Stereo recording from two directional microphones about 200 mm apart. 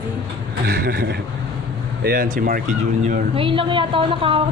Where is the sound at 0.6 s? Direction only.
50° right (ahead or behind).